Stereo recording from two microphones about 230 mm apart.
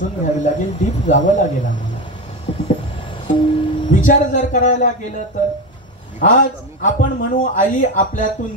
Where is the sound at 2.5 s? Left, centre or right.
Left.